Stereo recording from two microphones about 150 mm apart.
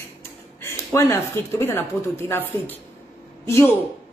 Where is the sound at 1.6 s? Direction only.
15° left (ahead or behind).